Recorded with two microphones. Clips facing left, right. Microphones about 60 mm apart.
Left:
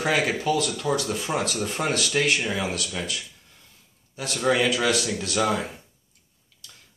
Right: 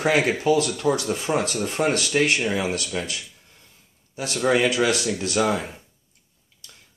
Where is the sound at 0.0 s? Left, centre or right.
Right.